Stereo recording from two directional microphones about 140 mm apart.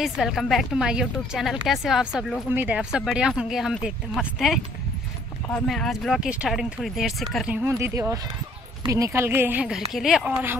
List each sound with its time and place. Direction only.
0.0 s a woman's voice: centre (ahead or behind)
7.8 s speech: 20° right (ahead or behind); by 10.3 s centre (ahead or behind)